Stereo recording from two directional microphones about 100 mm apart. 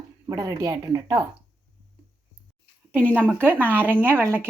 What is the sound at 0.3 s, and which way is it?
Speech, 35° right (ahead or behind).